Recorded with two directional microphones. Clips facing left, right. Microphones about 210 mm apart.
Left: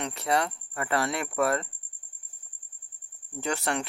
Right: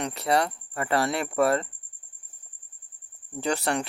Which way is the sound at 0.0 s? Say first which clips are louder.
Right 3 dB; 35° right (ahead or behind).